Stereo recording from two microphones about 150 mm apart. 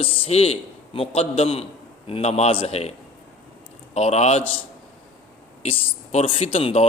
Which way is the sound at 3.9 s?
45° left (ahead or behind).